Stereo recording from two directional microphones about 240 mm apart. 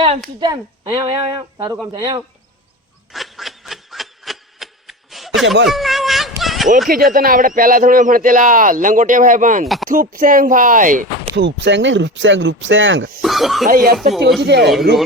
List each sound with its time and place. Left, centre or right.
0.3 s speech: centre
3.1 s snicker: centre
5.6 s a sound: centre
6.8 s speech: right
9.6 s speech: centre
9.9 s speech: right
13.2 s snicker: centre
13.7 s speech: right